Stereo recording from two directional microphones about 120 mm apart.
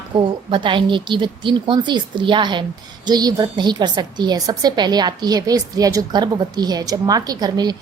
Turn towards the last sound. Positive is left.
turn(degrees=-35)  # may be behind; listen again after turning